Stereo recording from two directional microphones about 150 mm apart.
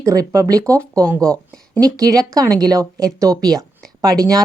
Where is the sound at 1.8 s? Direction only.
25° right (ahead or behind).